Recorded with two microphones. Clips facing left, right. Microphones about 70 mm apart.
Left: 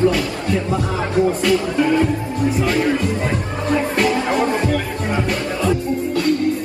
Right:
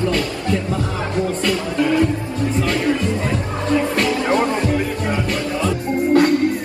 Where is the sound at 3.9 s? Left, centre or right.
Centre.